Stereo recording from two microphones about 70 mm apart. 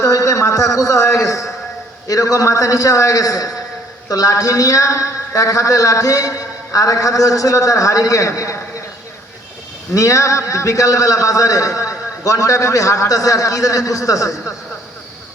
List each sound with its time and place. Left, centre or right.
0.0 s a man's voice: left
9.9 s a man's voice: left